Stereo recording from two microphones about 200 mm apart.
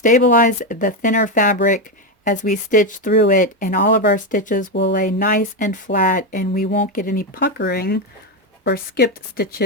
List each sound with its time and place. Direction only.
0.0 s speech: 40° left (ahead or behind)